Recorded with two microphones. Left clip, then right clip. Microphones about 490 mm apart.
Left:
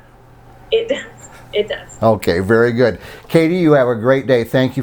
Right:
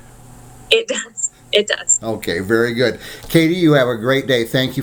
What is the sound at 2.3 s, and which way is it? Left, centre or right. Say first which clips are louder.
Speech: left 4 dB; left.